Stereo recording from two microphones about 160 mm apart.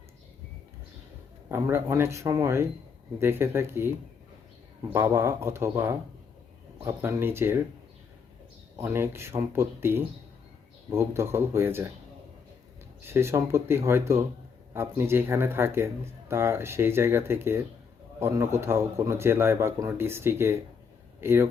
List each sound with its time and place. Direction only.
1.5 s a man's voice: 15° right (ahead or behind)
8.7 s a man's voice: 15° right (ahead or behind)
13.0 s a man's voice: 15° right (ahead or behind)